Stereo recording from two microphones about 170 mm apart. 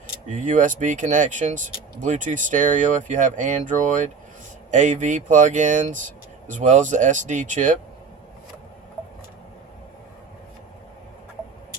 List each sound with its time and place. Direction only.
0.3 s speech: 45° right (ahead or behind)